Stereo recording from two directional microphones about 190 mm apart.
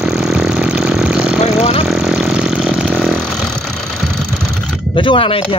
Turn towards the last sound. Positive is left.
turn(degrees=30)  # may be behind; listen again after turning